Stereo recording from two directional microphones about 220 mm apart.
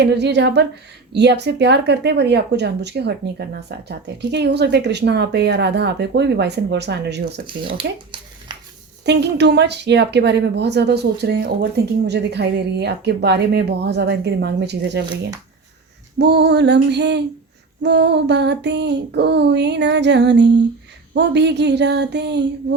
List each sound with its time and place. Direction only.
0.0 s speech: 50° right (ahead or behind)
7.4 s speech: 25° right (ahead or behind)
9.0 s speech: 50° right (ahead or behind)
16.1 s speech: 50° right (ahead or behind)